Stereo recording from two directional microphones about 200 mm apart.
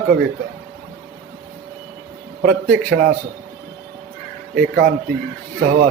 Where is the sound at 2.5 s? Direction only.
50° right (ahead or behind).